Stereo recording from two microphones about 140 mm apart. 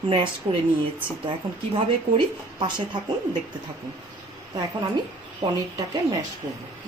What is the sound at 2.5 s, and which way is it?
Speech, 35° right (ahead or behind).